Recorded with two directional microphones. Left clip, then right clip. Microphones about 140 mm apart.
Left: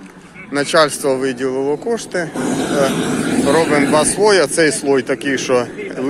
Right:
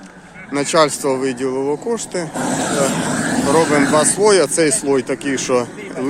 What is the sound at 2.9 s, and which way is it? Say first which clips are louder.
Speech: left 1 dB; 35° right (ahead or behind).